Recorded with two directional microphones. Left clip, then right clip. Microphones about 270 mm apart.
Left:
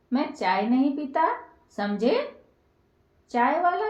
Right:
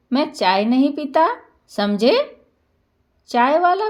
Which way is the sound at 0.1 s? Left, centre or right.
Right.